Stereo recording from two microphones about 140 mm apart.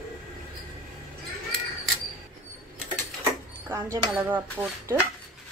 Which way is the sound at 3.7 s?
25° right (ahead or behind).